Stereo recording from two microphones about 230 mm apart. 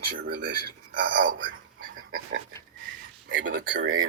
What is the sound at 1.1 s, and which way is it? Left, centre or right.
Speech, right.